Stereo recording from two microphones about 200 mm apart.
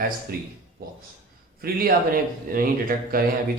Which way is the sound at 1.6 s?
50° right (ahead or behind).